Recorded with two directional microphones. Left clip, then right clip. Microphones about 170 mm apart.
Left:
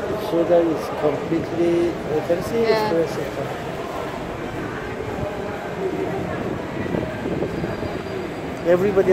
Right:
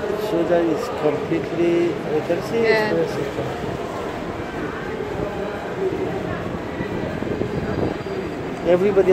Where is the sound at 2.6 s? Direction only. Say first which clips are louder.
Right 2 dB; centre (ahead or behind).